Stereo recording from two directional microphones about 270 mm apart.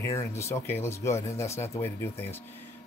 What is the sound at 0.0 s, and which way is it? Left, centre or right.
A man's voice, centre.